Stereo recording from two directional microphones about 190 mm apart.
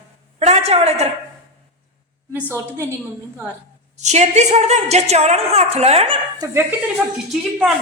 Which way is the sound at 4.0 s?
35° right (ahead or behind).